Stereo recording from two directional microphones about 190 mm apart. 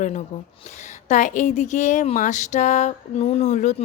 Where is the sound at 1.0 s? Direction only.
40° left (ahead or behind).